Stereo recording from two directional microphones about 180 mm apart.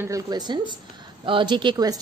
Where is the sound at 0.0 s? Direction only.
20° right (ahead or behind).